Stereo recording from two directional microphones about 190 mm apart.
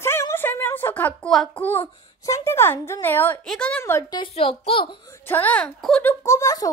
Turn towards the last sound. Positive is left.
turn(degrees=15)  # may be behind; listen again after turning